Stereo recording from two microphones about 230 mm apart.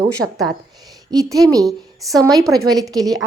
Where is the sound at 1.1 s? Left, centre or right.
Centre.